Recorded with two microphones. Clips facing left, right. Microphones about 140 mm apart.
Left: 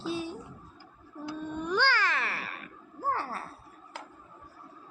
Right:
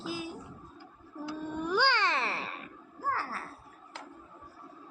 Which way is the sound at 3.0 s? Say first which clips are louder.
Left 2 dB; 25° left (ahead or behind).